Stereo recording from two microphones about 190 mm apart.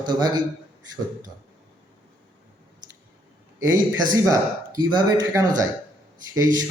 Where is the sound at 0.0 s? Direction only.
25° right (ahead or behind).